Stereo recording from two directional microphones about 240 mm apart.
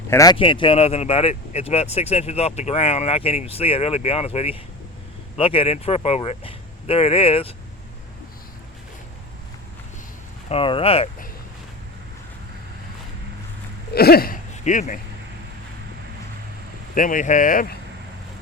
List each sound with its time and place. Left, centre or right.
0.1 s speech: centre
10.5 s speech: left
13.9 s speech: left
16.9 s speech: left